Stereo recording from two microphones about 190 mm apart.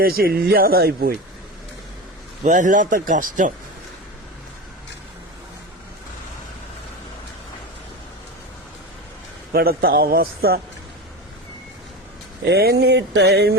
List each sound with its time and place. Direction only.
0.0 s a man's voice: 50° right (ahead or behind)
2.4 s a man's voice: 40° right (ahead or behind)
9.5 s a man's voice: 55° right (ahead or behind)
12.5 s a sound: 60° right (ahead or behind)